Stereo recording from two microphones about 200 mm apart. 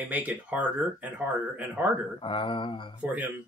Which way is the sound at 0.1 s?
5° right (ahead or behind).